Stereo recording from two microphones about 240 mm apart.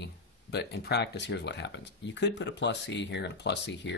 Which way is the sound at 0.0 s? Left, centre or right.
Left.